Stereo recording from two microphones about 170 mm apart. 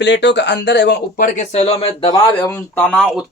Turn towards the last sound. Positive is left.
turn(degrees=5)  # may be behind; listen again after turning